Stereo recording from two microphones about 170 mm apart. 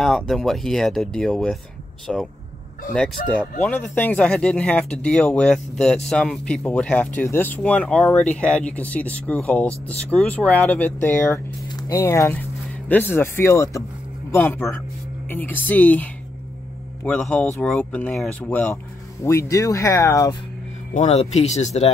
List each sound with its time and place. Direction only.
0.0 s speech: centre (ahead or behind)
3.2 s speech: 50° left (ahead or behind)
3.6 s speech: 10° left (ahead or behind)
20.9 s speech: 40° left (ahead or behind)